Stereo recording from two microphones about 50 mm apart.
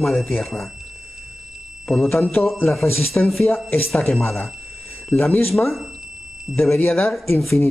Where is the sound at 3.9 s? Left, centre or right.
Centre.